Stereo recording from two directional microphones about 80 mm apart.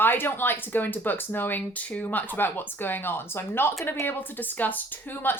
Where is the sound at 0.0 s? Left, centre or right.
Left.